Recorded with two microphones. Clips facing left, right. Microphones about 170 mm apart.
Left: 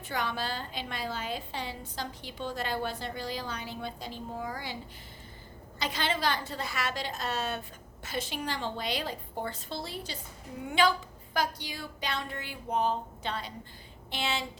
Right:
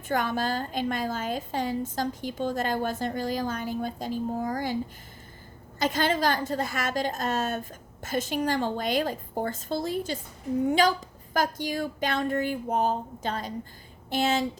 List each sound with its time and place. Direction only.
0.1 s a woman's voice: 45° right (ahead or behind)
5.8 s a woman's voice: 45° right (ahead or behind)